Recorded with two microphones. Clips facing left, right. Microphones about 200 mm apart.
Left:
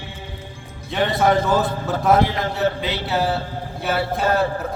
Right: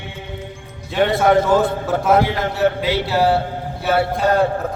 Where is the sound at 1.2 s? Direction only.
55° right (ahead or behind).